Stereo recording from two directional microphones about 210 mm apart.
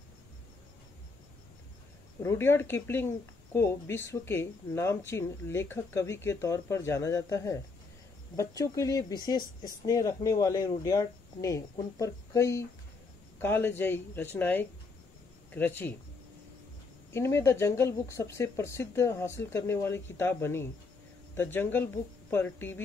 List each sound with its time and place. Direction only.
2.2 s speech: 10° left (ahead or behind)
17.1 s speech: 10° left (ahead or behind)